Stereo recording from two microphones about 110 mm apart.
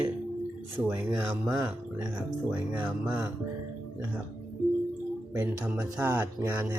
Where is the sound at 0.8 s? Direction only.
20° right (ahead or behind).